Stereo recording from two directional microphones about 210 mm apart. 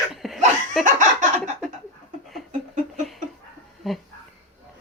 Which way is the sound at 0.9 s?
40° right (ahead or behind).